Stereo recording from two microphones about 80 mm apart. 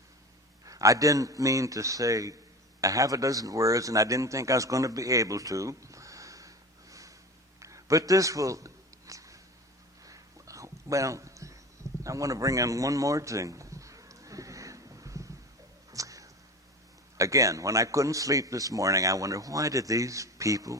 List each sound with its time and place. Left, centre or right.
0.6 s speech: right
7.6 s a sound: right
17.2 s speech: right